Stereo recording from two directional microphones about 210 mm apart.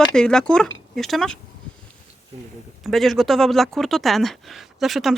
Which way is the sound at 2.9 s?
Centre (ahead or behind).